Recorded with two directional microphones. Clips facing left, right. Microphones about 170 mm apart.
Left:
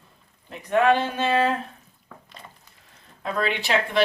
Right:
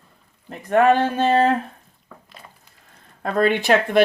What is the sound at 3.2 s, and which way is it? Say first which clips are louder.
Speech: right 8 dB; 50° right (ahead or behind).